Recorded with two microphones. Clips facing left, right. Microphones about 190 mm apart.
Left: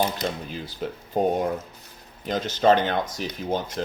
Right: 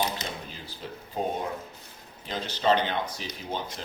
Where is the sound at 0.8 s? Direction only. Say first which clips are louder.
Left 9 dB; 70° left (ahead or behind).